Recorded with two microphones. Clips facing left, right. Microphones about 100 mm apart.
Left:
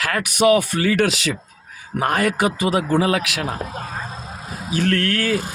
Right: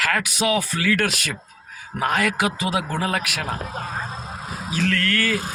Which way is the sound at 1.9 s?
60° left (ahead or behind).